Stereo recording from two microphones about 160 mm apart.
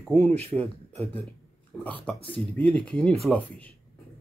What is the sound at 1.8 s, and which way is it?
Speech, 10° left (ahead or behind).